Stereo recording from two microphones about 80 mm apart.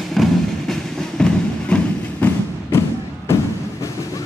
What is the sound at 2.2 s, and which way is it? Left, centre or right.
Thump, left.